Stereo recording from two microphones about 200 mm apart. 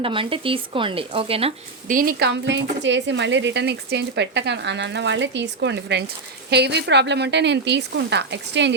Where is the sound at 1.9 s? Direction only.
45° right (ahead or behind).